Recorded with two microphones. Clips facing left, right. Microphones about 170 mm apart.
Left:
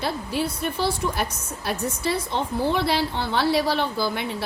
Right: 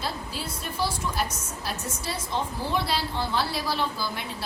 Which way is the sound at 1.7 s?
60° left (ahead or behind).